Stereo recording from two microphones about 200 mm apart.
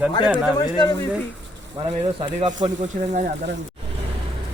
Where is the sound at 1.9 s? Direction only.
25° right (ahead or behind).